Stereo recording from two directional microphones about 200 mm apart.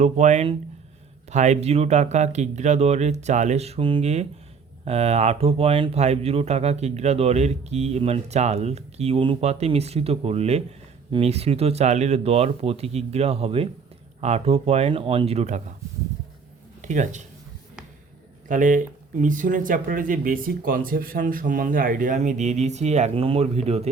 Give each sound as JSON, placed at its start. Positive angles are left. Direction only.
{"t": 0.0, "sound": "speech", "side_deg": -35}
{"t": 16.8, "sound": "speech", "side_deg": -40}
{"t": 18.4, "sound": "speech", "side_deg": -40}